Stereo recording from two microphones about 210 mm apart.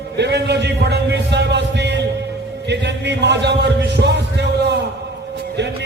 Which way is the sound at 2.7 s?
55° right (ahead or behind).